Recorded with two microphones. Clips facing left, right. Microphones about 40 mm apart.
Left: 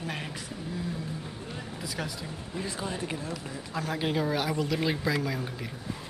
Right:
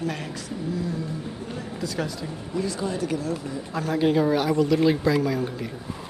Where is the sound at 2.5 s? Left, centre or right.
Left.